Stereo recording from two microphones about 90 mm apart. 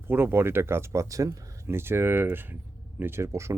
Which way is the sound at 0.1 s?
25° right (ahead or behind).